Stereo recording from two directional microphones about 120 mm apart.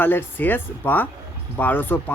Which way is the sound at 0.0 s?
15° left (ahead or behind).